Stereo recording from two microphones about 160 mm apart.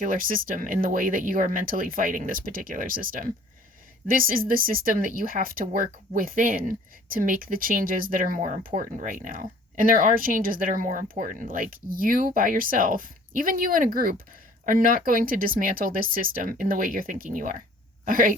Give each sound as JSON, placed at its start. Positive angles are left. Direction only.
{"t": 0.0, "sound": "speech", "side_deg": -60}